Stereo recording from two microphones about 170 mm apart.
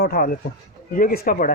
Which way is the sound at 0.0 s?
60° left (ahead or behind).